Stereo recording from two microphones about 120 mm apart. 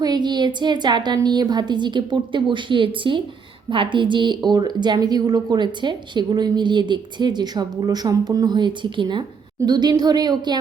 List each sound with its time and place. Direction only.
0.0 s a woman's voice: 35° right (ahead or behind)